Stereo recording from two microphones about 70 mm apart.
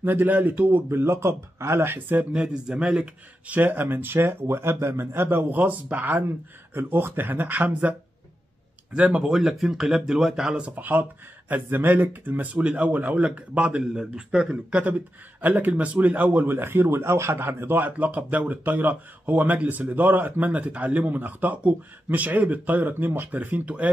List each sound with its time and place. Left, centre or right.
0.0 s speech: right
2.3 s speech: centre
8.9 s speech: centre
10.7 s speech: right